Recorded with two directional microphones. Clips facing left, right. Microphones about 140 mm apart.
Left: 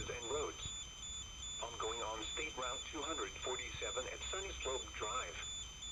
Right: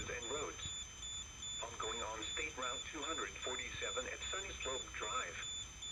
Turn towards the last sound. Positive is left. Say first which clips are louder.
# left 1 dB
turn(degrees=35)  # may be behind; listen again after turning